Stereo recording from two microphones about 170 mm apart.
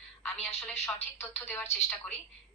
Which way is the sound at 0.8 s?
15° left (ahead or behind).